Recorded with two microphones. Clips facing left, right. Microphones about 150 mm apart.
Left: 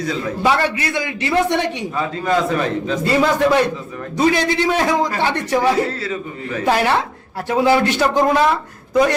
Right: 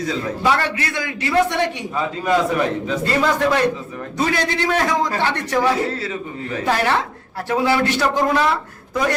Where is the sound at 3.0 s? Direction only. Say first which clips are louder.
Left 3 dB; 10° left (ahead or behind).